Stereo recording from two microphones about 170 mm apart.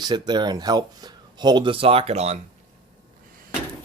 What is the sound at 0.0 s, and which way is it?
Speech, 25° right (ahead or behind).